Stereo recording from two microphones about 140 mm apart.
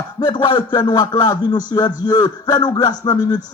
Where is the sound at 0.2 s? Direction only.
30° left (ahead or behind).